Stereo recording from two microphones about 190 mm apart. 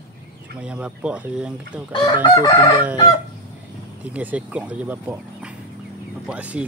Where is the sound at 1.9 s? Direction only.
25° left (ahead or behind).